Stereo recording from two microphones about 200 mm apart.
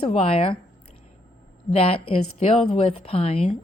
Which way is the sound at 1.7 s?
30° left (ahead or behind).